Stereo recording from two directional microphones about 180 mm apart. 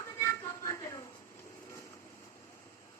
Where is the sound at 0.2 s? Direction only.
15° left (ahead or behind).